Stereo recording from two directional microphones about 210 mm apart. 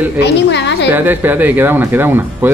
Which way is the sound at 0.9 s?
10° right (ahead or behind).